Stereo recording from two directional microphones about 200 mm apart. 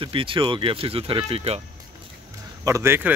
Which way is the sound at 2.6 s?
15° right (ahead or behind).